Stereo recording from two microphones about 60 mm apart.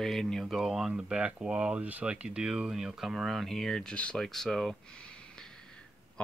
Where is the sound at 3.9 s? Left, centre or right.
Centre.